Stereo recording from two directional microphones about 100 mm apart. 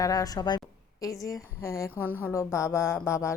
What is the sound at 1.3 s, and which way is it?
Speech, 30° left (ahead or behind).